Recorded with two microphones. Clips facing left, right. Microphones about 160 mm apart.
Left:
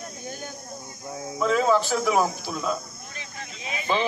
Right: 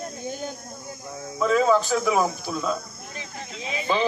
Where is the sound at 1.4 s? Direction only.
Centre (ahead or behind).